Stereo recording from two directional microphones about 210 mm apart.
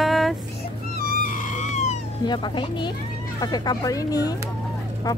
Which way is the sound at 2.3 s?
20° left (ahead or behind).